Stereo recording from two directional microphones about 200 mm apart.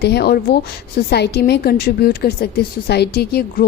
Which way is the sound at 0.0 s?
55° left (ahead or behind).